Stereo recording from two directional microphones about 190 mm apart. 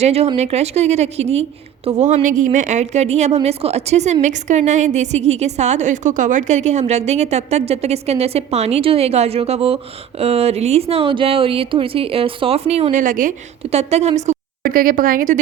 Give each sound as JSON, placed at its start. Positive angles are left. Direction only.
{"t": 0.0, "sound": "a woman's voice", "side_deg": -35}